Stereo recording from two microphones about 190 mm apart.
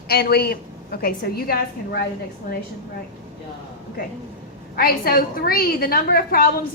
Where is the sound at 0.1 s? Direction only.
55° left (ahead or behind).